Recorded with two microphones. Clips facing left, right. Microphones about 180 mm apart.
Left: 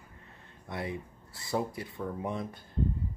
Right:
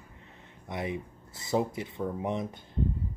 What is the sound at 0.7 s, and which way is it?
Speech, 20° right (ahead or behind).